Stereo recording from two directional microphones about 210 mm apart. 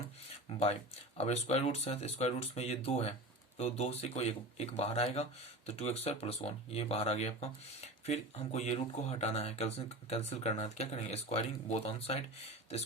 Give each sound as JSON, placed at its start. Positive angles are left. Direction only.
{"t": 1.2, "sound": "speech", "side_deg": 30}